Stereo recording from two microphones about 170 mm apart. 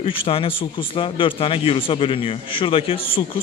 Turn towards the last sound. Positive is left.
turn(degrees=30)  # may be behind; listen again after turning